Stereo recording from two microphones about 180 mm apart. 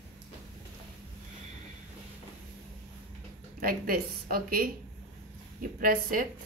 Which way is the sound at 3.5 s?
55° right (ahead or behind).